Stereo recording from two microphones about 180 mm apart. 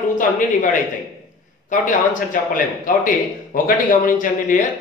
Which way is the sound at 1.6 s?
45° left (ahead or behind).